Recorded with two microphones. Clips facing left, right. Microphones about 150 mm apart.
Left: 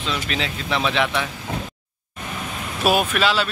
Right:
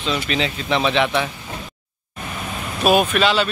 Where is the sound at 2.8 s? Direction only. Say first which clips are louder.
Right 3 dB; 5° left (ahead or behind).